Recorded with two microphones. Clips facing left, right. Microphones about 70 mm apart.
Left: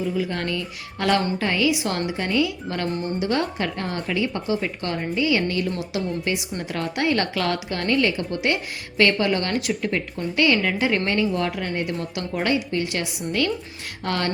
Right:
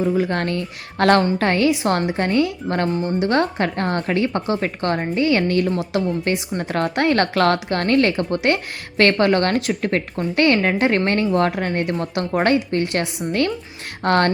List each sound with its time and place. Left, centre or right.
0.0 s a woman's voice: right